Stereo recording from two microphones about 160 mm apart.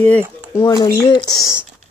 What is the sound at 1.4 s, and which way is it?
Speech, 5° right (ahead or behind).